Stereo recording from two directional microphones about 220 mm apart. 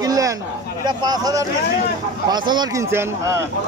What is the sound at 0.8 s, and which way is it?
A man's voice, 20° right (ahead or behind).